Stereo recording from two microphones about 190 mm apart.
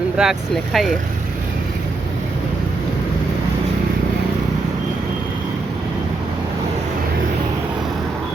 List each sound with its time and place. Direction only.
0.2 s speech: centre (ahead or behind)